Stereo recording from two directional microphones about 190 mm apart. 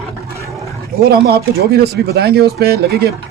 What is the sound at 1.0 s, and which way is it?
Speech, 55° right (ahead or behind).